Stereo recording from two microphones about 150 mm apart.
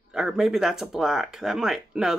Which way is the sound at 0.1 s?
5° right (ahead or behind).